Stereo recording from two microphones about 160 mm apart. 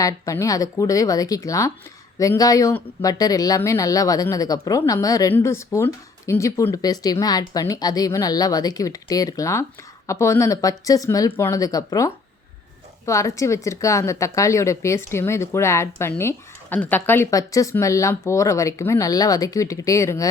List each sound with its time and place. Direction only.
0.0 s speech: 20° left (ahead or behind)